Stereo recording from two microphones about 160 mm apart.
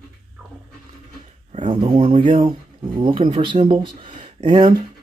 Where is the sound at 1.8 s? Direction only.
35° right (ahead or behind).